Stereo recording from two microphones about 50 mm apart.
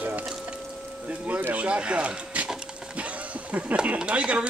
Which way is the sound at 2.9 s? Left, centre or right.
Right.